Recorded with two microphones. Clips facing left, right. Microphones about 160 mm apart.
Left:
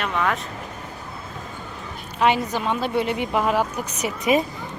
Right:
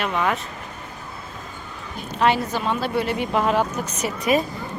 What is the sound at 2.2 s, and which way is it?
A woman's voice, 15° left (ahead or behind).